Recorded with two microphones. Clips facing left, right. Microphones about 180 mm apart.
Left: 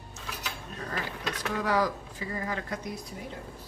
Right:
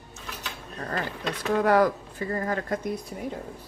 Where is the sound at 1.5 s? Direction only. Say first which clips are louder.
Right 7 dB; 55° right (ahead or behind).